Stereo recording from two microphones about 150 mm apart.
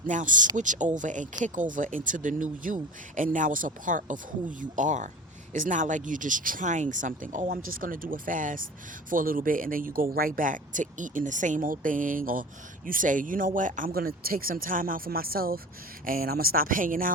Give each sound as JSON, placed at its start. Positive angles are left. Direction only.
{"t": 0.0, "sound": "speech", "side_deg": -60}